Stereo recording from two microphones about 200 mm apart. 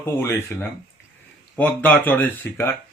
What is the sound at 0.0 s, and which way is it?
Speech, 10° left (ahead or behind).